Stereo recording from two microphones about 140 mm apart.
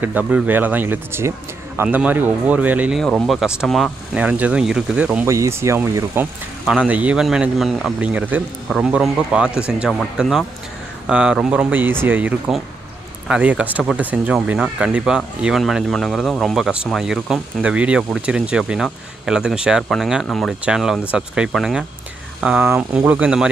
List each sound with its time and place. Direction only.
0.0 s speech: 10° right (ahead or behind)
3.0 s speech: centre (ahead or behind)
4.2 s speech: 10° right (ahead or behind)
5.3 s speech: 20° right (ahead or behind)
6.6 s speech: 10° right (ahead or behind)